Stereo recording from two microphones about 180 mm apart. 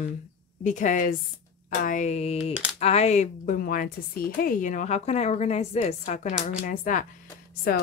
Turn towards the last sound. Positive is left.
turn(degrees=55)  # may be behind; listen again after turning